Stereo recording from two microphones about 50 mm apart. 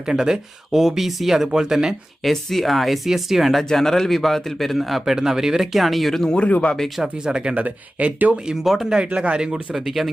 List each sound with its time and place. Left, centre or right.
0.0 s speech: centre
2.2 s a man's voice: centre
3.6 s a man's voice: centre
6.3 s speech: left
6.7 s a man's voice: centre
7.0 s speech: centre
7.5 s speech: right
8.6 s a man's voice: centre
9.1 s speech: right
9.7 s a man's voice: centre